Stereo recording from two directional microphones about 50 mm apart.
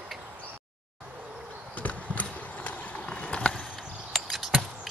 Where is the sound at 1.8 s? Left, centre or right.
Left; by 3.8 s centre.